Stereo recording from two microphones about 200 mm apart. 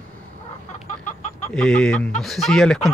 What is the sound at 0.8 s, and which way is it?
Chicken, 35° left (ahead or behind).